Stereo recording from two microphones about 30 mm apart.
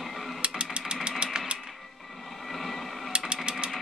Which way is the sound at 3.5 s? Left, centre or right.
Right.